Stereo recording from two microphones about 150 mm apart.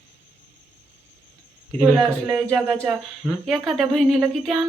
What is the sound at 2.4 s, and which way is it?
A woman's voice, 5° left (ahead or behind).